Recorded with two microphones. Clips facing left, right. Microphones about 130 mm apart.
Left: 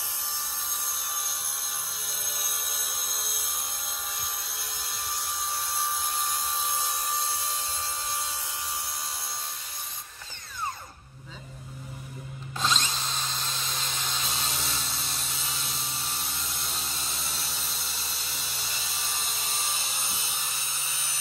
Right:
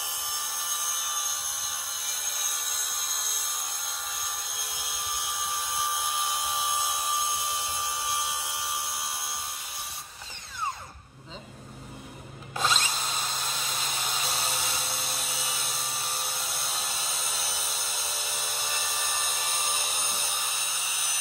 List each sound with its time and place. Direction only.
0.9 s a sound: 5° right (ahead or behind)
4.8 s tools: 5° right (ahead or behind)
12.5 s tools: 10° right (ahead or behind)
18.5 s wood: 55° right (ahead or behind)
18.8 s wood: 15° right (ahead or behind)